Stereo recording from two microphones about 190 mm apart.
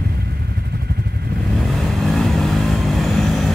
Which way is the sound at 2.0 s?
Centre (ahead or behind).